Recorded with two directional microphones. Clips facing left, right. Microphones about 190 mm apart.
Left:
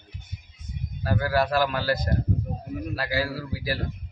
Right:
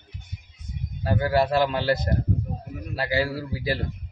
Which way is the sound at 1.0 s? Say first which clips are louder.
Right 2 dB; 25° right (ahead or behind).